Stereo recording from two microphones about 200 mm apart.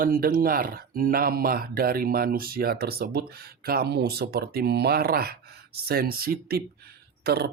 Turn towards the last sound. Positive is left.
turn(degrees=-55)  # may be behind; listen again after turning